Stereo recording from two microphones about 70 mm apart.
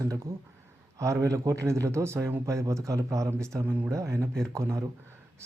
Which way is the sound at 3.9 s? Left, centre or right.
Right.